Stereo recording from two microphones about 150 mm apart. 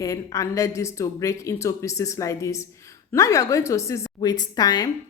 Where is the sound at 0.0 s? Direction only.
20° left (ahead or behind).